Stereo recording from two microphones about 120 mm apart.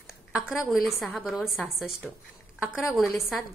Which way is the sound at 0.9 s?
10° left (ahead or behind).